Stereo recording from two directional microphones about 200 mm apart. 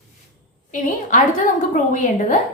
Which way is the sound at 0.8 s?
40° left (ahead or behind).